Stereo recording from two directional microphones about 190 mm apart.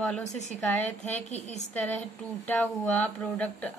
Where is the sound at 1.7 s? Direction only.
10° left (ahead or behind).